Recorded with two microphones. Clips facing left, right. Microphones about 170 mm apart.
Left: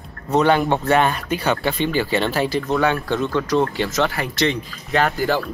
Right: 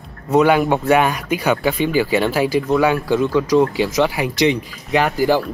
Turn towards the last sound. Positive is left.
turn(degrees=-15)  # may be behind; listen again after turning